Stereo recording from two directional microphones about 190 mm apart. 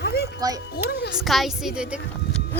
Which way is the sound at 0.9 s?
60° left (ahead or behind).